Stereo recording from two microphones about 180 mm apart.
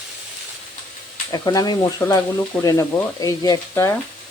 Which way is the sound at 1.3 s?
20° left (ahead or behind).